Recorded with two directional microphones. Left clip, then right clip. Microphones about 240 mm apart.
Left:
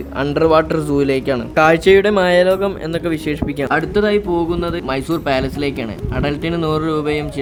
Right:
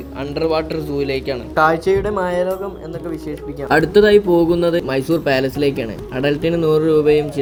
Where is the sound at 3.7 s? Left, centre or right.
Centre.